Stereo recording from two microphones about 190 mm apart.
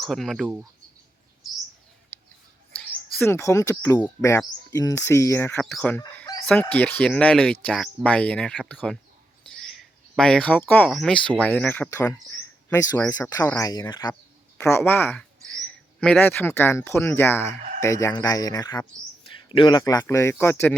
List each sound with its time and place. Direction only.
0.0 s cricket: centre (ahead or behind)
2.1 s a sound: 10° left (ahead or behind)
3.2 s speech: 15° left (ahead or behind)
6.4 s chicken: 5° left (ahead or behind)
6.7 s speech: 10° left (ahead or behind)
9.5 s a sound: centre (ahead or behind)
10.8 s speech: centre (ahead or behind)